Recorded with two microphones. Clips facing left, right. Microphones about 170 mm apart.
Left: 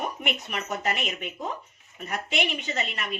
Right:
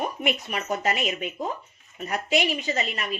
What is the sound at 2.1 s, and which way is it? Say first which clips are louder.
Speech: right 4 dB; 35° right (ahead or behind).